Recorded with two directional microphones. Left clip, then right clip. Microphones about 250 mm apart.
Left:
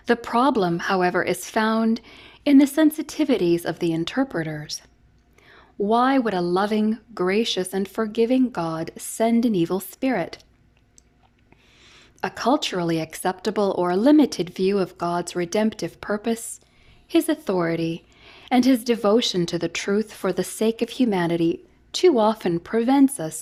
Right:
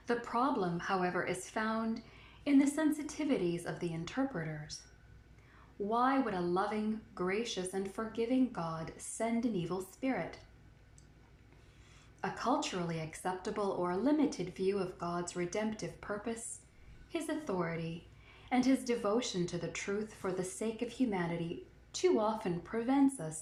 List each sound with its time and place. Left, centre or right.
0.0 s speech: left
5.9 s speech: left
11.9 s speech: left